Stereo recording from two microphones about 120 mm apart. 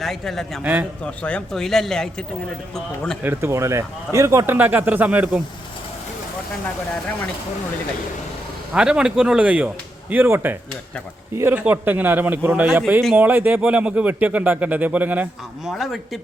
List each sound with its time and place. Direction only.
0.0 s a man's voice: centre (ahead or behind)
0.6 s speech: 15° right (ahead or behind)
1.0 s a man's voice: 10° left (ahead or behind)
3.2 s speech: 20° right (ahead or behind)
8.7 s a man's voice: 5° right (ahead or behind)
15.7 s a man's voice: centre (ahead or behind)